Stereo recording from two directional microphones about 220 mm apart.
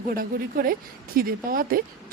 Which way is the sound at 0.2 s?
40° right (ahead or behind).